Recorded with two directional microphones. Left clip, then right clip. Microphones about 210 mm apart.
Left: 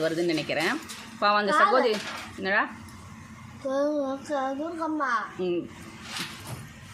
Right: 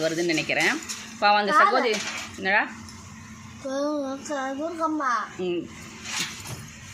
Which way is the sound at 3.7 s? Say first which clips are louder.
Left 1 dB; 15° right (ahead or behind).